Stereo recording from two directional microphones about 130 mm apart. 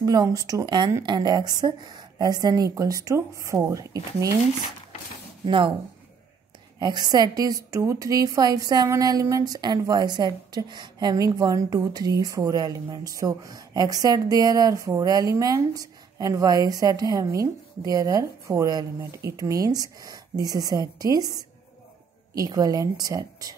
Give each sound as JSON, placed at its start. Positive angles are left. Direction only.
{"t": 0.0, "sound": "a woman's voice", "side_deg": -30}
{"t": 5.4, "sound": "speech", "side_deg": -40}
{"t": 6.8, "sound": "a woman's voice", "side_deg": -35}